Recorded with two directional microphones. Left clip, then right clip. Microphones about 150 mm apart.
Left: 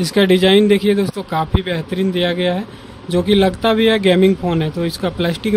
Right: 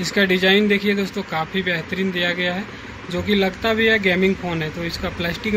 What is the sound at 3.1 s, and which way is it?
Speech, 90° left.